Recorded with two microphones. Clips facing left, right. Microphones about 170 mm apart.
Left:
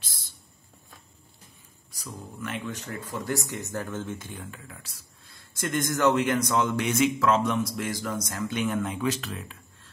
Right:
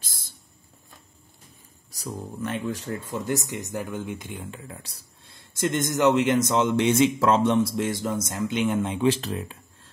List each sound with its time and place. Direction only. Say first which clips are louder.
1.9 s speech: right 6 dB; 40° right (ahead or behind)
3.1 s speech: right 2 dB; 20° right (ahead or behind)